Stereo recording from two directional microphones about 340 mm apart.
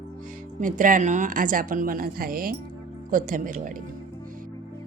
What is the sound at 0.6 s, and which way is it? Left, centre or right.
Speech, right.